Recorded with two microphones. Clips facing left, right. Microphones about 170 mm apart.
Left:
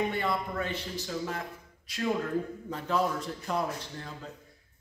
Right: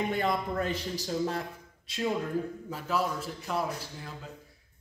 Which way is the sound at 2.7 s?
5° right (ahead or behind).